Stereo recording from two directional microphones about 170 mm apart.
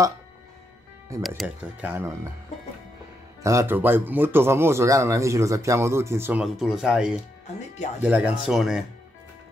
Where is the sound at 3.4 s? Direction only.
15° right (ahead or behind); by 8.8 s centre (ahead or behind).